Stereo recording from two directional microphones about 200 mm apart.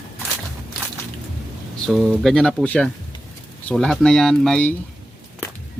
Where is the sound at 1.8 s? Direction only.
Centre (ahead or behind).